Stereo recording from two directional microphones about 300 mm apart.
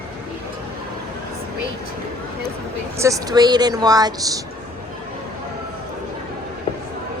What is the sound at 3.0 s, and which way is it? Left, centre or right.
Speech, centre.